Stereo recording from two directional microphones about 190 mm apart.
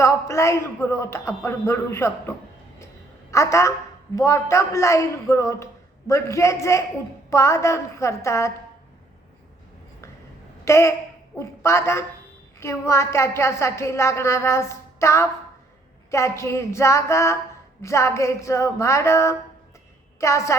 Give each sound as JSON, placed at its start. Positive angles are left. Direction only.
{"t": 0.0, "sound": "a woman's voice", "side_deg": 15}
{"t": 3.3, "sound": "a woman's voice", "side_deg": 15}
{"t": 10.7, "sound": "a woman's voice", "side_deg": 15}